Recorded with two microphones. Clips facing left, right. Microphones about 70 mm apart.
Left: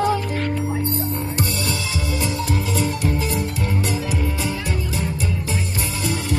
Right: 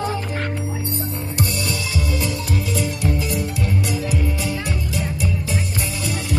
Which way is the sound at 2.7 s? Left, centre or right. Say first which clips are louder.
Even; left.